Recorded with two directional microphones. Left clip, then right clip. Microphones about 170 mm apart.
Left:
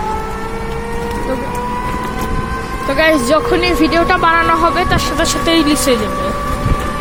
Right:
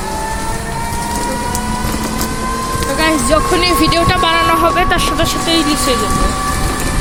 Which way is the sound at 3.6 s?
20° left (ahead or behind).